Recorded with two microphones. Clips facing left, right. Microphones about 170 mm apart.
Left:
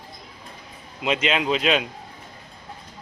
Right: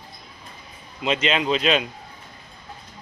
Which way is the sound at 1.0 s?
5° left (ahead or behind).